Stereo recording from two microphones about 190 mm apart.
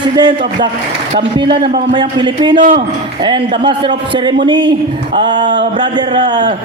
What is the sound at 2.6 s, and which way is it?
Speech, 45° right (ahead or behind).